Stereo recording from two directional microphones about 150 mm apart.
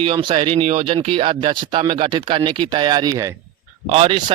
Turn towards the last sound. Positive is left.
turn(degrees=-40)  # may be behind; listen again after turning